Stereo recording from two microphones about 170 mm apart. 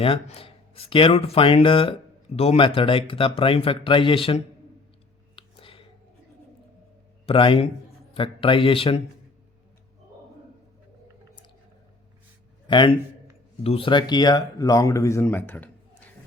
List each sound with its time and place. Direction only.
0.0 s speech: 35° left (ahead or behind)
5.4 s a sound: 30° left (ahead or behind)
7.3 s speech: 30° left (ahead or behind)
12.6 s a man's voice: 30° left (ahead or behind); by 16.0 s 10° left (ahead or behind)